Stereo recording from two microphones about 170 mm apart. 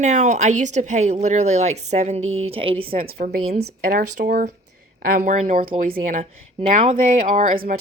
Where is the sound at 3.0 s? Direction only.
65° right (ahead or behind); by 6.3 s 45° right (ahead or behind).